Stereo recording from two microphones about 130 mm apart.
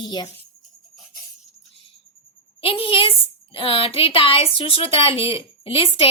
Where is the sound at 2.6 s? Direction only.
45° left (ahead or behind).